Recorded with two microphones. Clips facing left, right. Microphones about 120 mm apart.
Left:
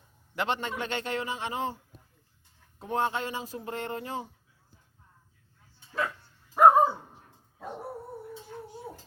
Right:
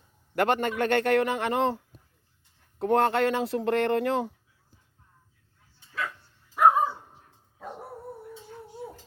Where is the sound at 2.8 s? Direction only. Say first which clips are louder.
Right 7 dB; 70° right (ahead or behind).